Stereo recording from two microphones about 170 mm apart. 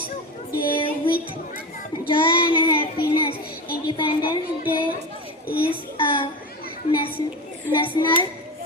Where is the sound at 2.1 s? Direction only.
30° left (ahead or behind).